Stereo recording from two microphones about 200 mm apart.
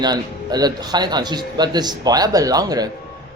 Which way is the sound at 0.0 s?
20° right (ahead or behind).